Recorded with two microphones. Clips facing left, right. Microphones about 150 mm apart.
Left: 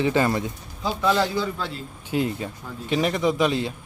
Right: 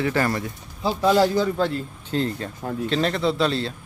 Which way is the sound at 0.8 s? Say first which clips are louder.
Right 4 dB; 35° right (ahead or behind).